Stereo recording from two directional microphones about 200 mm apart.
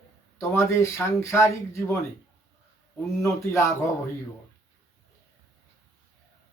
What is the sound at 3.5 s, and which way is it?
Speech, 15° left (ahead or behind).